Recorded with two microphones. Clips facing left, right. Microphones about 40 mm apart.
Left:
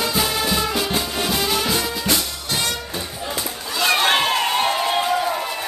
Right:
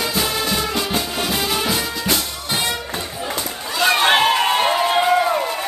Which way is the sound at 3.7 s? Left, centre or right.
Centre.